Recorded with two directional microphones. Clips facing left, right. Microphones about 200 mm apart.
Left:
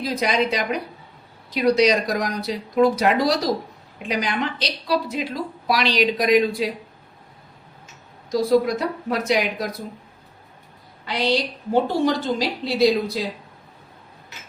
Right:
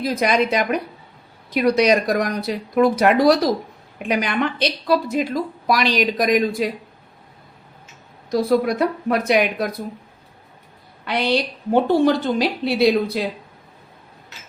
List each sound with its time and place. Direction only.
0.0 s a woman's voice: 50° right (ahead or behind)
8.3 s a woman's voice: 60° right (ahead or behind)
11.0 s a woman's voice: 60° right (ahead or behind)